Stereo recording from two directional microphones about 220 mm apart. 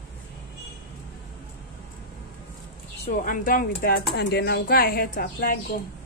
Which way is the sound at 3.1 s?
35° left (ahead or behind).